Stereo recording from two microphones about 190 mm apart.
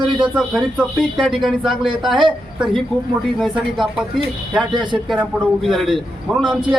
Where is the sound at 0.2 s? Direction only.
5° right (ahead or behind).